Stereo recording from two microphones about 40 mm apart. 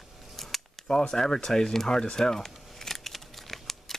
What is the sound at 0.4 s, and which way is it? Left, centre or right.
Camera, centre.